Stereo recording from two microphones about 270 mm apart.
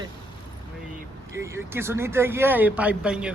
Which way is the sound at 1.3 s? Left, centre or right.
Centre.